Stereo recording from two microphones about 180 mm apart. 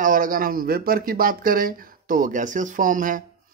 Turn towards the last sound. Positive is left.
turn(degrees=-45)  # may be behind; listen again after turning